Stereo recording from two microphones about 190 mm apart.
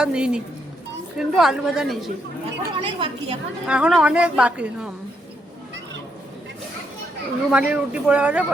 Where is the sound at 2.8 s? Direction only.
30° right (ahead or behind).